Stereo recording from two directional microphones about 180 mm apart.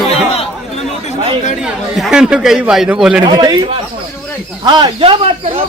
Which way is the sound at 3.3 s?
25° right (ahead or behind).